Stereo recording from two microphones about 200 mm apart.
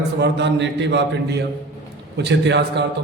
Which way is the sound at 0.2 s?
60° right (ahead or behind).